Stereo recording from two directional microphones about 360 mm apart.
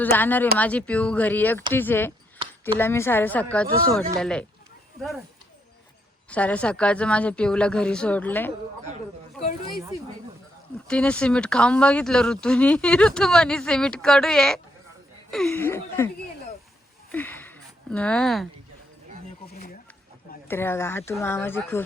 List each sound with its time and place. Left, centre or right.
0.0 s speech: centre
6.3 s speech: centre
9.7 s speech: centre
10.8 s speech: centre
17.1 s a sound: centre
19.5 s a sound: left
20.5 s speech: centre